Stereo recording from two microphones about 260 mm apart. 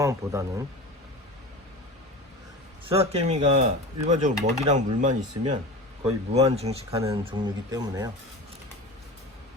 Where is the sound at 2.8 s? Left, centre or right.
Right.